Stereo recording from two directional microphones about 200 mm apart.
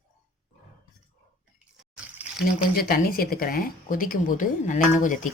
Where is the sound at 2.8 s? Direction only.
45° left (ahead or behind).